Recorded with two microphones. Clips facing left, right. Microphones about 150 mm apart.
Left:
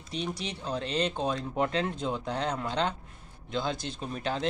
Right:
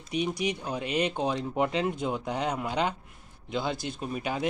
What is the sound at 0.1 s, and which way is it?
Speech, 10° right (ahead or behind).